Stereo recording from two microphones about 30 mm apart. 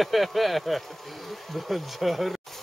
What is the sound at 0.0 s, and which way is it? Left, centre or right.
Speech, centre.